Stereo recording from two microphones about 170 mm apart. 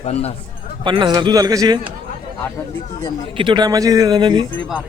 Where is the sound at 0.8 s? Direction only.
30° right (ahead or behind).